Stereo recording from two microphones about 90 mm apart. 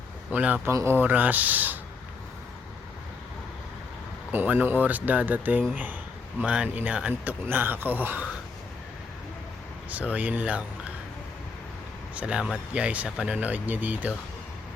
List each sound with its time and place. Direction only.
0.3 s speech: 15° right (ahead or behind)
0.7 s speech: 35° right (ahead or behind)
0.9 s speech: 20° right (ahead or behind)
4.3 s speech: 20° right (ahead or behind)
9.9 s speech: 15° right (ahead or behind)
12.1 s speech: 10° right (ahead or behind)